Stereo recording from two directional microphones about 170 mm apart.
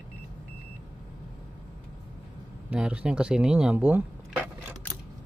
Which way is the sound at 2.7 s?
5° right (ahead or behind).